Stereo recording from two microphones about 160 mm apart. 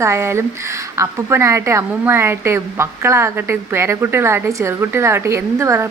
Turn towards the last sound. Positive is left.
turn(degrees=-15)  # may be behind; listen again after turning